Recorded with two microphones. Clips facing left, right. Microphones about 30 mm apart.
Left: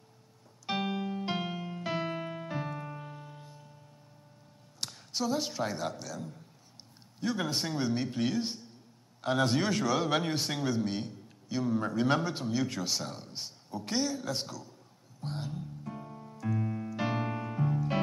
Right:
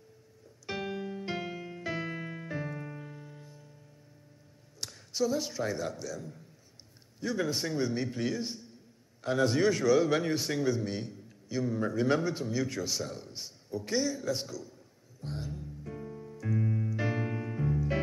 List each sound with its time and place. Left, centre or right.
0.7 s keyboard: left
4.7 s a man's voice: left
15.1 s music: left
15.8 s music: centre
16.9 s keyboard: left